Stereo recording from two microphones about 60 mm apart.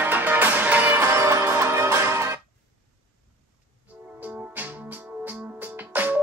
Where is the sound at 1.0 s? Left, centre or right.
Right.